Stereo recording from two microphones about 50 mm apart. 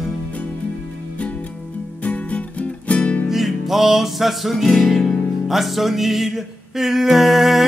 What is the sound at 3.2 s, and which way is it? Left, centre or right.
Music, centre.